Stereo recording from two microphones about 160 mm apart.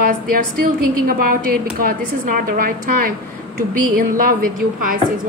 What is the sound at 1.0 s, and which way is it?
A woman's voice, 65° right (ahead or behind).